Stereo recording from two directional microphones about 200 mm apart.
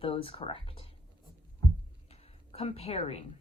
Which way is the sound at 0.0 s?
25° left (ahead or behind).